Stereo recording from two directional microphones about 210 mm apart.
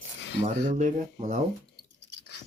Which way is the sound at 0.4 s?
35° right (ahead or behind).